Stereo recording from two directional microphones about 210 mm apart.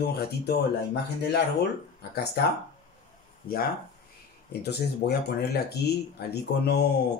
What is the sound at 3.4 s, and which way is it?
Speech, 45° left (ahead or behind).